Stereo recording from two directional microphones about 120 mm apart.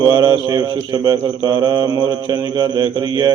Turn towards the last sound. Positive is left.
turn(degrees=-35)  # may be behind; listen again after turning